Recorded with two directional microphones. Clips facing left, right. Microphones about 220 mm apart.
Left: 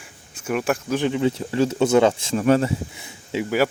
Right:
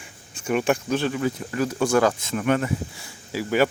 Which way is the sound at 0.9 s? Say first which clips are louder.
Left 3 dB; 20° left (ahead or behind).